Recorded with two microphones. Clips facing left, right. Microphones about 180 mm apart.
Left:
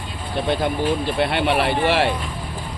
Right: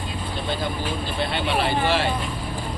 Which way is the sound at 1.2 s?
65° left (ahead or behind).